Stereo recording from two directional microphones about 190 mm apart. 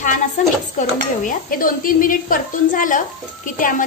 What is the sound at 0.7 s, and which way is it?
A woman's voice, 45° left (ahead or behind).